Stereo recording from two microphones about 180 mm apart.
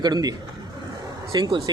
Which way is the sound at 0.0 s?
20° right (ahead or behind).